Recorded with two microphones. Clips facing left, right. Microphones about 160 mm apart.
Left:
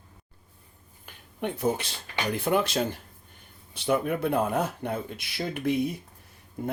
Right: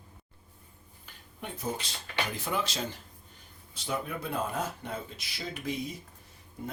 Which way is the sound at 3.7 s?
65° left (ahead or behind).